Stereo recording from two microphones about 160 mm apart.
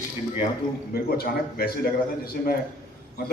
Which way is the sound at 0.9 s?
70° left (ahead or behind).